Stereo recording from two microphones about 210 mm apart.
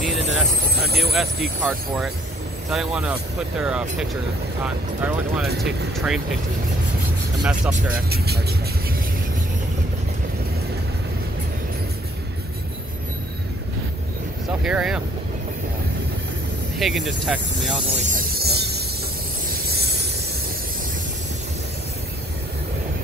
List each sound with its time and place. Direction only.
0.8 s speech: 50° right (ahead or behind)
1.6 s speech: 5° right (ahead or behind)
7.4 s speech: 5° right (ahead or behind)
8.1 s speech: 50° right (ahead or behind)
14.5 s speech: 5° right (ahead or behind)
16.7 s speech: centre (ahead or behind)
18.3 s music: 50° right (ahead or behind)
19.8 s train: 50° right (ahead or behind)